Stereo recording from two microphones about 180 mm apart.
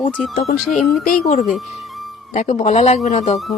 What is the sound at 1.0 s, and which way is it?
A woman's voice, 45° left (ahead or behind).